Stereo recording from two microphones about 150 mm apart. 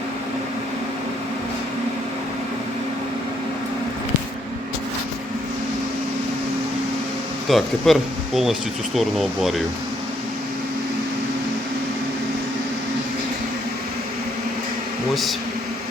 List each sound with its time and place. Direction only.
7.4 s speech: centre (ahead or behind)
15.1 s speech: centre (ahead or behind)